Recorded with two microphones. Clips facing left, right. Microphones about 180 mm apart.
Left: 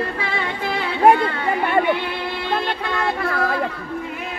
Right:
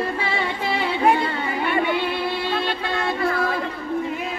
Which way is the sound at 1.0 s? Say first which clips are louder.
Left 5 dB; 60° left (ahead or behind).